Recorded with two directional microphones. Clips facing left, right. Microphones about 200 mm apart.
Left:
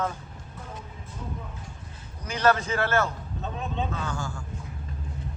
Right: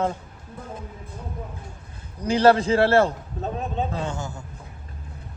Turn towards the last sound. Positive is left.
turn(degrees=-20)  # may be behind; listen again after turning